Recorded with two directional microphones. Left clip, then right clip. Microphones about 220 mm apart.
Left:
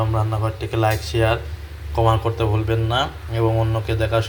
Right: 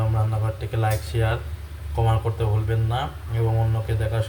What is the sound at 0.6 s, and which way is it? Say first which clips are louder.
Speech: left 7 dB; 10° left (ahead or behind).